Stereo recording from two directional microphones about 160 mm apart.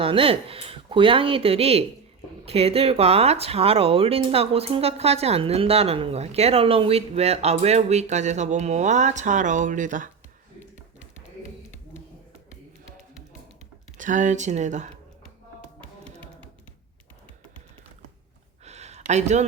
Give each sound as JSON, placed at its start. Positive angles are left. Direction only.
{"t": 0.0, "sound": "speech", "side_deg": -35}
{"t": 14.0, "sound": "speech", "side_deg": -50}
{"t": 15.8, "sound": "music", "side_deg": 5}
{"t": 18.6, "sound": "a sound", "side_deg": -45}